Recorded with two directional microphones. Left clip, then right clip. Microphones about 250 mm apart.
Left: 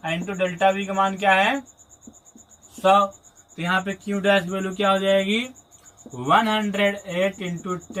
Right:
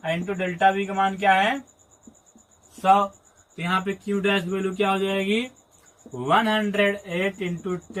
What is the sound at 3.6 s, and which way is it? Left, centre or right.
Speech, centre.